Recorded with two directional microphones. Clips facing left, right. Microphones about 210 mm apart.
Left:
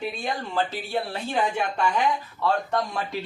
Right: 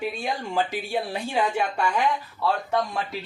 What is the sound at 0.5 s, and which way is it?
Speech, 15° right (ahead or behind).